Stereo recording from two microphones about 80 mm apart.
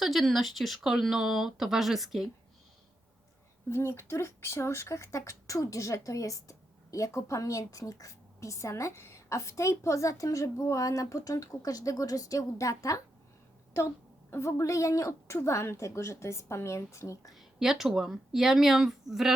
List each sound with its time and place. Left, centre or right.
0.0 s speech: centre
3.7 s speech: left
14.3 s speech: left
17.3 s speech: centre